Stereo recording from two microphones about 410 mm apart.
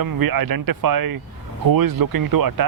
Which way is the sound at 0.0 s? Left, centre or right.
Right.